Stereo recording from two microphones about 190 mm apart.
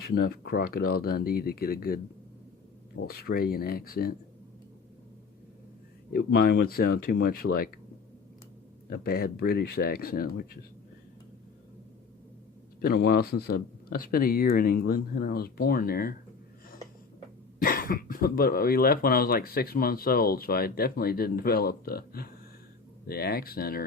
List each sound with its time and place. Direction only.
0.0 s speech: 55° left (ahead or behind)
3.0 s speech: 55° left (ahead or behind)
6.1 s speech: 50° left (ahead or behind)
8.9 s speech: 50° left (ahead or behind)
12.8 s speech: 50° left (ahead or behind)
17.6 s speech: 50° left (ahead or behind)